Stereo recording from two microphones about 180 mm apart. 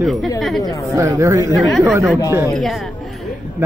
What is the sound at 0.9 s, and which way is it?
Speech, 15° right (ahead or behind).